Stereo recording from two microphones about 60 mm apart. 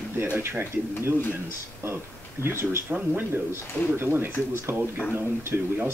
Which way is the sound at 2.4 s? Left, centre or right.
Right.